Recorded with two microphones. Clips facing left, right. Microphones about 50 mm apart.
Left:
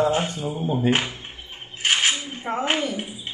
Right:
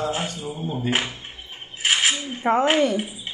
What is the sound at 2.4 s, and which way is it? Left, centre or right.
Speech, right.